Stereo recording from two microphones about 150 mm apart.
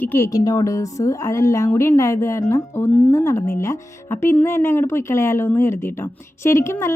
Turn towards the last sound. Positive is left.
turn(degrees=20)  # may be behind; listen again after turning